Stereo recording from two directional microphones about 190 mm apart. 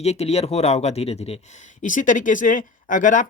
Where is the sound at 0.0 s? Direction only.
35° left (ahead or behind).